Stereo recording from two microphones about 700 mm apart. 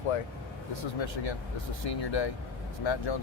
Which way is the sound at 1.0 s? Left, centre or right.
Left.